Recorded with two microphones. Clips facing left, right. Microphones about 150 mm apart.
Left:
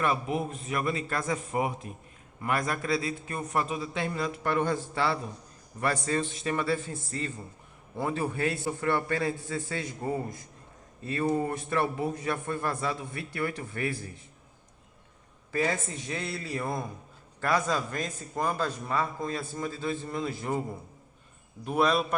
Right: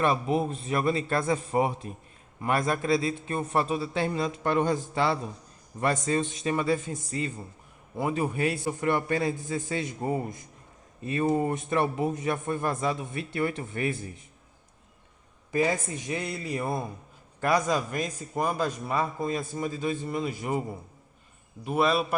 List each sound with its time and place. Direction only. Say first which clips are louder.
0.0 s a man's voice: right 3 dB; 30° right (ahead or behind)
15.5 s a man's voice: right 3 dB; 15° right (ahead or behind)
21.6 s a man's voice: right 1 dB; centre (ahead or behind)